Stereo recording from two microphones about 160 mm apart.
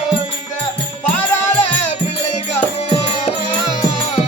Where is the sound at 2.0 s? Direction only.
40° left (ahead or behind).